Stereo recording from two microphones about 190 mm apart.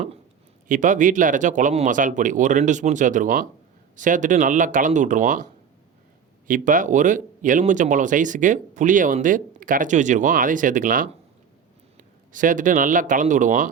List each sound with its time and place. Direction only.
0.7 s speech: 40° right (ahead or behind)
6.5 s speech: 45° right (ahead or behind)